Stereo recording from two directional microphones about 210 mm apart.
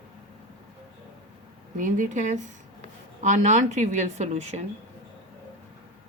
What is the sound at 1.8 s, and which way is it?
A woman's voice, 40° right (ahead or behind).